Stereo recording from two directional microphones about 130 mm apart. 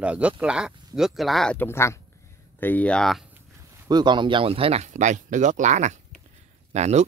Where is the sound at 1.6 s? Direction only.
20° left (ahead or behind); by 3.2 s 5° left (ahead or behind).